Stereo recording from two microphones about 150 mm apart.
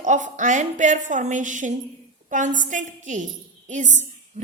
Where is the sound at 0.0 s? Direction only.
55° right (ahead or behind).